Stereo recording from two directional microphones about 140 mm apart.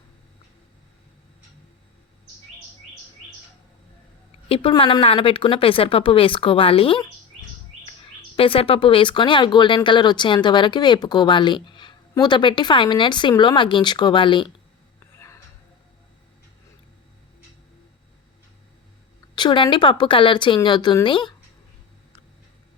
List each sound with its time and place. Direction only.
4.4 s a woman's voice: 45° left (ahead or behind)
8.4 s speech: 40° left (ahead or behind)
19.4 s speech: 35° left (ahead or behind)